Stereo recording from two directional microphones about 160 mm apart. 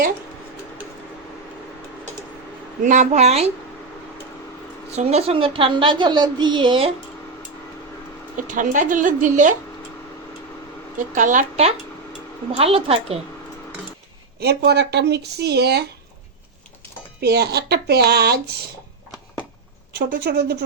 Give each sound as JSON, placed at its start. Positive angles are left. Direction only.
{"t": 2.8, "sound": "a woman's voice", "side_deg": -50}
{"t": 4.9, "sound": "a woman's voice", "side_deg": -40}
{"t": 8.4, "sound": "a woman's voice", "side_deg": -55}
{"t": 11.1, "sound": "a woman's voice", "side_deg": -50}
{"t": 14.3, "sound": "speech", "side_deg": -90}
{"t": 17.2, "sound": "speech", "side_deg": -85}
{"t": 20.0, "sound": "speech", "side_deg": -60}